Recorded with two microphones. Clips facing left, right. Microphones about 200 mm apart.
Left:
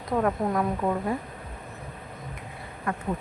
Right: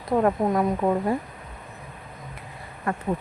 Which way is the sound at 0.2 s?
30° right (ahead or behind).